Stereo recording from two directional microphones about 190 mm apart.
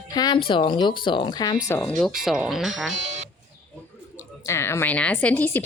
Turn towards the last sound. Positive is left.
turn(degrees=10)  # may be behind; listen again after turning